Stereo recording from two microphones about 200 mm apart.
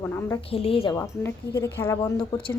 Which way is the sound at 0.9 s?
10° left (ahead or behind).